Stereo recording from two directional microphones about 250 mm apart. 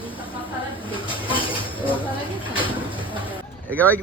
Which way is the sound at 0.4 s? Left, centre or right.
Left.